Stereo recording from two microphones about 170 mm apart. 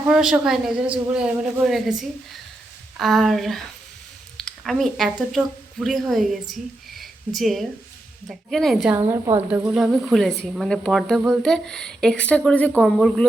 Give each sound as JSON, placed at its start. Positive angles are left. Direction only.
{"t": 0.1, "sound": "a man's voice", "side_deg": -5}
{"t": 9.0, "sound": "a woman's voice", "side_deg": -20}
{"t": 9.5, "sound": "a man's voice", "side_deg": -5}